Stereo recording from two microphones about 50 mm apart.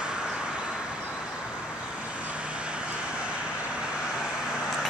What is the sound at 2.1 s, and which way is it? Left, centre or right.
Vehicle, right.